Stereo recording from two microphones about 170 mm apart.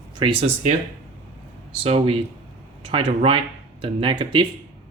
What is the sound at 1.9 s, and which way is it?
Speech, 35° right (ahead or behind).